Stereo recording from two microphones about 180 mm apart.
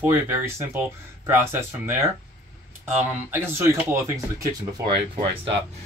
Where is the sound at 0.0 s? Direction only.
10° right (ahead or behind).